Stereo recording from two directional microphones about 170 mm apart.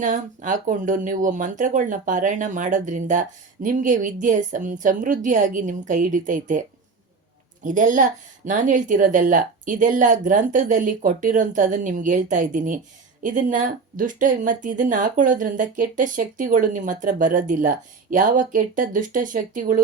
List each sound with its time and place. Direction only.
0.0 s a woman's voice: 50° right (ahead or behind)
7.6 s a woman's voice: 50° right (ahead or behind)